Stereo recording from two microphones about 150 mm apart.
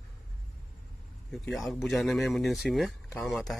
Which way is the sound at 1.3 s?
Centre (ahead or behind).